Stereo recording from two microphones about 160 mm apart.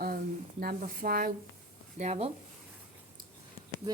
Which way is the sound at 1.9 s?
45° right (ahead or behind).